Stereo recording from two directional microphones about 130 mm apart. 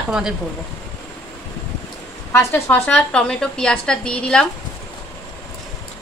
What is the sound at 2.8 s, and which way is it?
A woman's voice, 5° left (ahead or behind).